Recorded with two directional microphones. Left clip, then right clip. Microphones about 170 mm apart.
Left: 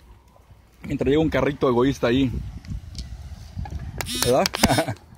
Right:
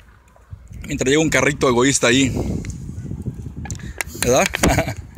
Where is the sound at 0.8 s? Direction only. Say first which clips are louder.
Right 3 dB; centre (ahead or behind).